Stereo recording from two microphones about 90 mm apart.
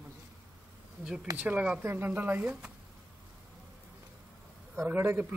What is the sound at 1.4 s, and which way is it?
A man's voice, 15° right (ahead or behind).